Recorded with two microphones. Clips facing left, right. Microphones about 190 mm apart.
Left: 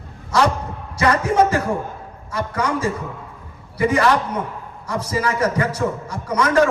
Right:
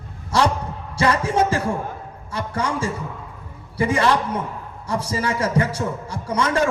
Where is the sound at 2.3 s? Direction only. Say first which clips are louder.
Left 2 dB; 30° right (ahead or behind).